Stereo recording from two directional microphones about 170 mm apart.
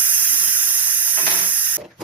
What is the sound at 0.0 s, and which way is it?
Water, 10° right (ahead or behind).